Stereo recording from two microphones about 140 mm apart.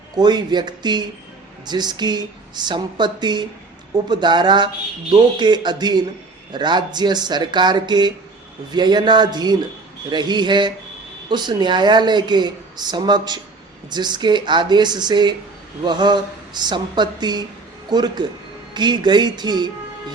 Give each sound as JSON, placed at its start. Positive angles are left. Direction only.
{"t": 0.2, "sound": "speech", "side_deg": -30}